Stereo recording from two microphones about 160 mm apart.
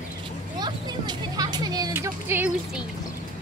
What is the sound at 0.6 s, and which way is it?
Speech, 25° right (ahead or behind).